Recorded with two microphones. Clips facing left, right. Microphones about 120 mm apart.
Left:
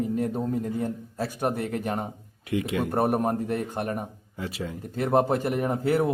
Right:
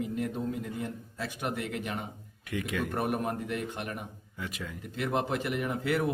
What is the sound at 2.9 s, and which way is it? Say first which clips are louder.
Speech: left 9 dB; 40° left (ahead or behind).